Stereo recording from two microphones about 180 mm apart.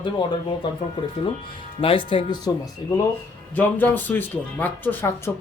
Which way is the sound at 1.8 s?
30° left (ahead or behind).